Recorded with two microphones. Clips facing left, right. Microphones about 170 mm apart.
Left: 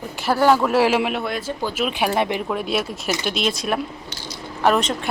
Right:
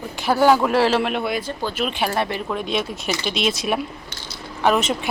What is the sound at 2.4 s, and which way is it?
Speech, 5° left (ahead or behind).